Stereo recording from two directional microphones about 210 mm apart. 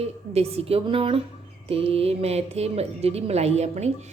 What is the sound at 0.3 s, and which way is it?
A woman's voice, 30° right (ahead or behind).